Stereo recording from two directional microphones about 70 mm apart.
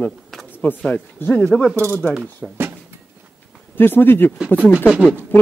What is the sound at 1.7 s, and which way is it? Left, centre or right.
Speech, right.